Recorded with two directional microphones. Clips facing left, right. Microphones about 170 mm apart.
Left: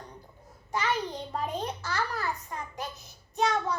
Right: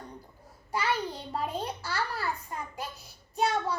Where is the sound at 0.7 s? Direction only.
10° right (ahead or behind).